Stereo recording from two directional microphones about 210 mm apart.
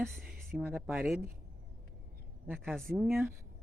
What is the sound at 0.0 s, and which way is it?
Speech, centre (ahead or behind).